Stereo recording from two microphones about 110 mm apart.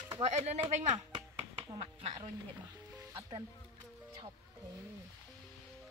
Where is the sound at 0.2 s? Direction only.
85° right.